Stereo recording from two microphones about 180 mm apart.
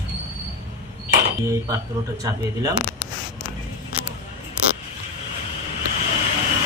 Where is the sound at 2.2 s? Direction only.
20° right (ahead or behind).